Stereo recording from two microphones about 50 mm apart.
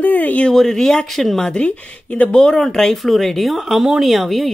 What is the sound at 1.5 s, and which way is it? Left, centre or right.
Speech, left.